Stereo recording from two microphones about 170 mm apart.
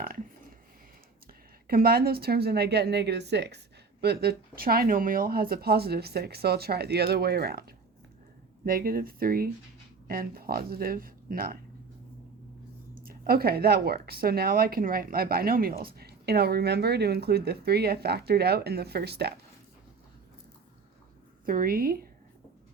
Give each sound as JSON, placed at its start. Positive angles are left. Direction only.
{"t": 1.6, "sound": "speech", "side_deg": -60}
{"t": 13.1, "sound": "speech", "side_deg": -60}
{"t": 21.4, "sound": "speech", "side_deg": -55}